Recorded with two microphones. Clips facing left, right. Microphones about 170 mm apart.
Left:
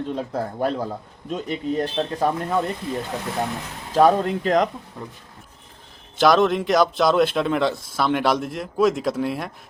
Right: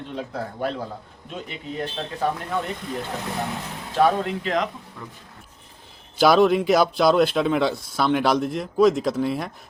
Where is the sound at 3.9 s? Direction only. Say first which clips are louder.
Left 3 dB; 40° left (ahead or behind).